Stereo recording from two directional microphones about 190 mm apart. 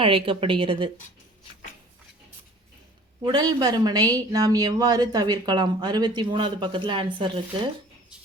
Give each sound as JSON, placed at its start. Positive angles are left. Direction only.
{"t": 0.0, "sound": "speech", "side_deg": -30}
{"t": 3.2, "sound": "speech", "side_deg": -20}